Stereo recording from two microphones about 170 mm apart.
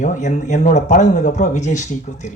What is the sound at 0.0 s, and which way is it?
Speech, 45° left (ahead or behind).